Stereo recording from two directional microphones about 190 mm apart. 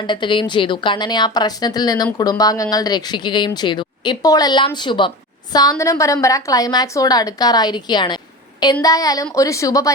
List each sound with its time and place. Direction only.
0.1 s a woman's voice: 25° left (ahead or behind)